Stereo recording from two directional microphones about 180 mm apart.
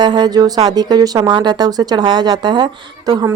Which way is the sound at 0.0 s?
25° right (ahead or behind).